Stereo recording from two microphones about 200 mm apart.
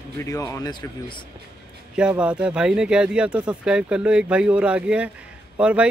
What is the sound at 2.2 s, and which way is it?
Speech, 5° right (ahead or behind).